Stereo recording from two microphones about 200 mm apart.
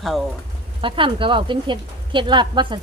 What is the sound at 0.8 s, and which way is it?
Speech, 25° right (ahead or behind).